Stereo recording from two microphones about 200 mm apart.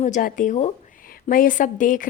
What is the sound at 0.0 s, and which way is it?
A woman's voice, 40° left (ahead or behind).